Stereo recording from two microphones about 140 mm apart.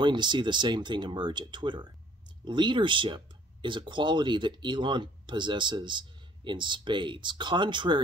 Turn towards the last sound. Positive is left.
turn(degrees=-35)  # may be behind; listen again after turning